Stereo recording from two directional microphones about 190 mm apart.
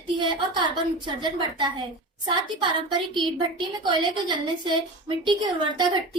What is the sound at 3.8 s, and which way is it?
A woman's voice, 25° right (ahead or behind).